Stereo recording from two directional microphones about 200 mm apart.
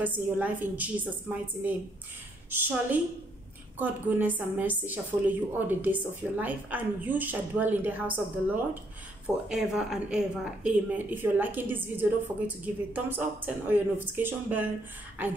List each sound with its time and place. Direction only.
0.0 s a woman's voice: 10° right (ahead or behind)